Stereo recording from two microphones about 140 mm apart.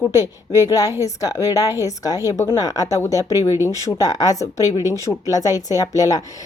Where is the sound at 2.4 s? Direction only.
20° left (ahead or behind).